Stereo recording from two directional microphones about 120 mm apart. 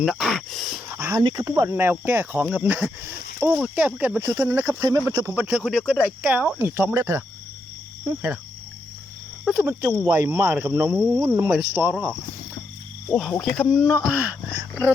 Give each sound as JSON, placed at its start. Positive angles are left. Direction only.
{"t": 0.0, "sound": "a sound", "side_deg": 0}
{"t": 0.9, "sound": "a sound", "side_deg": -20}
{"t": 1.2, "sound": "speech", "side_deg": -35}
{"t": 1.7, "sound": "speech", "side_deg": -20}
{"t": 5.4, "sound": "speech", "side_deg": -10}
{"t": 5.6, "sound": "speech", "side_deg": 0}
{"t": 9.5, "sound": "speech", "side_deg": -5}
{"t": 10.1, "sound": "speech", "side_deg": -20}
{"t": 13.1, "sound": "speech", "side_deg": 5}